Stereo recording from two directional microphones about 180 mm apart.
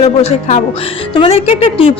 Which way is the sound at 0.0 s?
35° left (ahead or behind).